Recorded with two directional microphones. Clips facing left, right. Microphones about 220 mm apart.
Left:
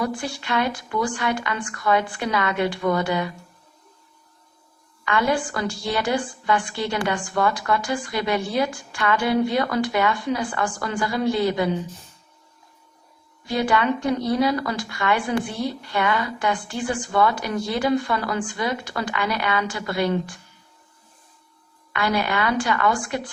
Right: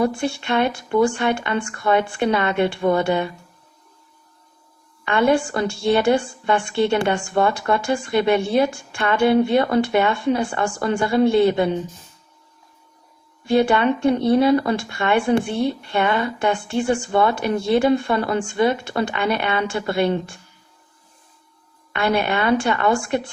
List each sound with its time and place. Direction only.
0.0 s a woman's voice: 25° right (ahead or behind)
5.3 s a woman's voice: 25° right (ahead or behind)
13.5 s a woman's voice: 25° right (ahead or behind)
21.9 s a woman's voice: 25° right (ahead or behind)